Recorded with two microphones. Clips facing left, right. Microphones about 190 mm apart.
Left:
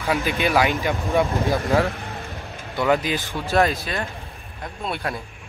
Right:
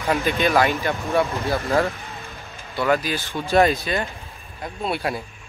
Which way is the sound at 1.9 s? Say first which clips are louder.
Left 2 dB; 60° left (ahead or behind).